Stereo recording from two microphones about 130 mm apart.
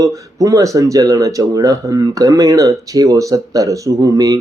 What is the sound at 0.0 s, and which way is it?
Speech, 25° right (ahead or behind).